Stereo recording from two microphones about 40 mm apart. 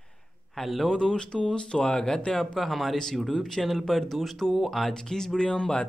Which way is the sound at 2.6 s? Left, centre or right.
Centre.